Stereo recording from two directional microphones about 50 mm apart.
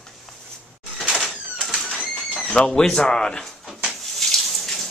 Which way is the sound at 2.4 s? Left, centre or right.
Centre.